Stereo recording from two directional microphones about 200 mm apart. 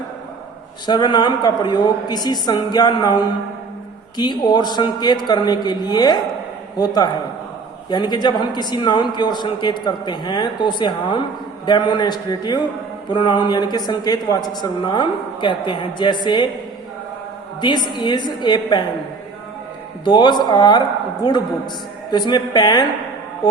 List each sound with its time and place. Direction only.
0.9 s a man's voice: 20° left (ahead or behind)
17.6 s a man's voice: 20° left (ahead or behind)
20.1 s a man's voice: 20° left (ahead or behind)
22.1 s a man's voice: 20° left (ahead or behind)